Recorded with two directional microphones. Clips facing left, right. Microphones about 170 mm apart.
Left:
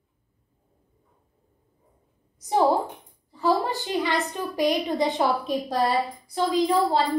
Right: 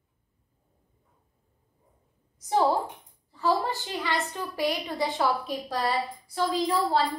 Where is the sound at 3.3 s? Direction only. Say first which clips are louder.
Left 3 dB; 15° left (ahead or behind).